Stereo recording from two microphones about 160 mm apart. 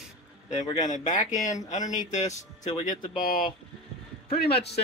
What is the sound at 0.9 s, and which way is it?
Speech, 50° left (ahead or behind).